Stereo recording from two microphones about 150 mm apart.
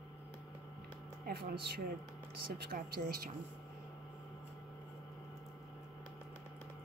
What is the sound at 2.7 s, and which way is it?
Speech, 80° right.